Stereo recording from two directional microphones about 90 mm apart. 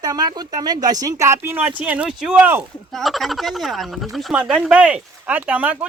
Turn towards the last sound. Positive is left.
turn(degrees=-20)  # may be behind; listen again after turning